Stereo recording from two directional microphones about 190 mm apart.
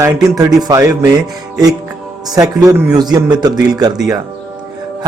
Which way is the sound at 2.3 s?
20° right (ahead or behind).